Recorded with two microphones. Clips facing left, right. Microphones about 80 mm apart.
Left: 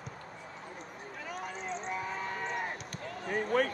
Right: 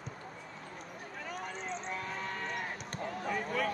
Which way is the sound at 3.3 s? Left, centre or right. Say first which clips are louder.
Left 6 dB; left.